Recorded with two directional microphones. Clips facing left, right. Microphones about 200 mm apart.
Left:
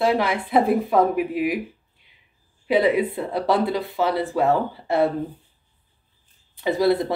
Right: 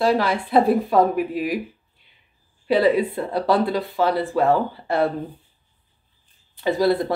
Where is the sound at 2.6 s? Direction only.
20° left (ahead or behind).